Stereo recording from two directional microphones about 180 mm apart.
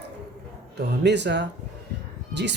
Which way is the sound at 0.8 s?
70° right (ahead or behind).